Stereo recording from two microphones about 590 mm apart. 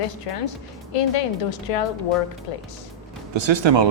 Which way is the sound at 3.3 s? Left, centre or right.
Right.